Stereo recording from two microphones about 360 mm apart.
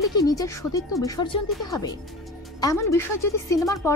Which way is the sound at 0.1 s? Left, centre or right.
Centre.